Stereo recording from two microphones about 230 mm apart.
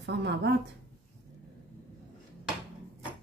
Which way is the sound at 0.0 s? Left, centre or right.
Right.